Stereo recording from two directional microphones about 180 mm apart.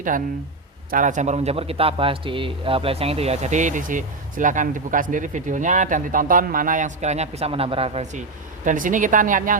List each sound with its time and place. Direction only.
0.1 s speech: 50° right (ahead or behind)
8.6 s speech: 45° right (ahead or behind)